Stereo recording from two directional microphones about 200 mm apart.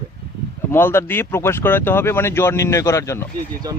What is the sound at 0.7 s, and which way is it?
Speech, 10° left (ahead or behind).